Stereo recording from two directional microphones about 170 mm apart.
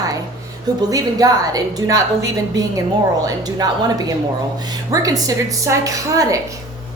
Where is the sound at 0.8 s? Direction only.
20° right (ahead or behind).